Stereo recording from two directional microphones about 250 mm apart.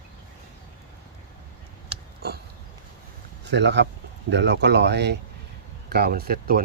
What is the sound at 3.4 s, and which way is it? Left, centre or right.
Speech, right.